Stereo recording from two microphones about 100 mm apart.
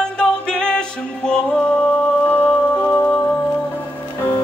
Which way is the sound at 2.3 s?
20° left (ahead or behind).